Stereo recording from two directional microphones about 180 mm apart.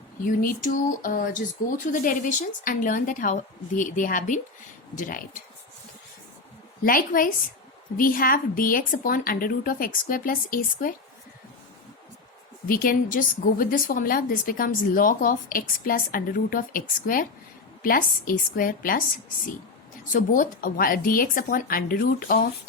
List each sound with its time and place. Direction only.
0.2 s a woman's voice: 50° left (ahead or behind)
6.8 s a woman's voice: 50° left (ahead or behind)
12.6 s a woman's voice: 55° left (ahead or behind)
20.1 s a woman's voice: 45° left (ahead or behind)